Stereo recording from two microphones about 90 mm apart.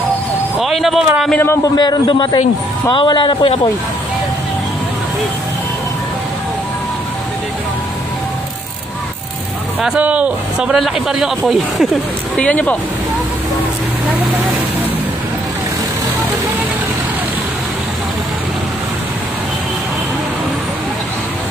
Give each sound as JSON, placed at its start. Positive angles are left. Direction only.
{"t": 0.6, "sound": "a man's voice", "side_deg": 0}
{"t": 1.6, "sound": "a man's voice", "side_deg": 55}
{"t": 9.9, "sound": "a man's voice", "side_deg": -15}
{"t": 12.4, "sound": "speech", "side_deg": 15}